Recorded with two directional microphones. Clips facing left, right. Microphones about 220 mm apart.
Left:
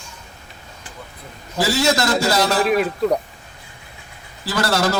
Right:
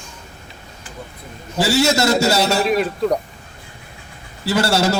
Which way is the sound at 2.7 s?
5° left (ahead or behind).